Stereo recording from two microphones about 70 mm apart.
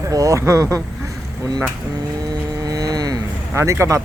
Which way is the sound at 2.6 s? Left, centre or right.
Right.